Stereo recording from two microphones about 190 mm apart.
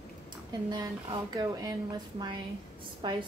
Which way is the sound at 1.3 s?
20° right (ahead or behind).